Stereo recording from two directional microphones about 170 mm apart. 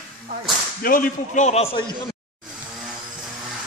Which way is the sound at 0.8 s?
55° left (ahead or behind).